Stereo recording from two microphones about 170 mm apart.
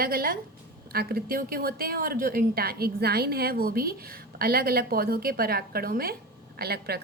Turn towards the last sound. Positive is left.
turn(degrees=-65)  # may be behind; listen again after turning